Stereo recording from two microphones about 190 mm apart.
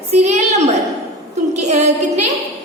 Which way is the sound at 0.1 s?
35° right (ahead or behind).